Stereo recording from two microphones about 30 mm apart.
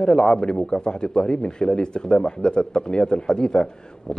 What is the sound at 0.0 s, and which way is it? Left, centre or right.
Speech, left.